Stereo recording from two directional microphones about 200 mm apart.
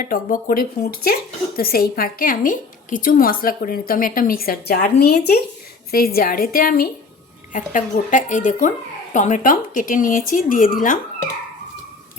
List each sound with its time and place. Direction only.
0.0 s a woman's voice: 45° left (ahead or behind)